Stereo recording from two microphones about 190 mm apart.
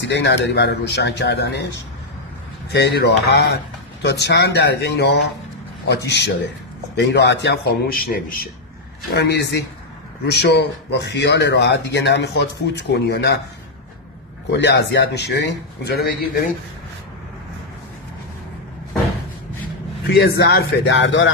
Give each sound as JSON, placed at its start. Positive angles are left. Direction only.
{"t": 0.1, "sound": "speech", "side_deg": 65}
{"t": 2.7, "sound": "speech", "side_deg": 60}
{"t": 9.1, "sound": "speech", "side_deg": 60}
{"t": 14.5, "sound": "speech", "side_deg": 65}
{"t": 20.1, "sound": "speech", "side_deg": 55}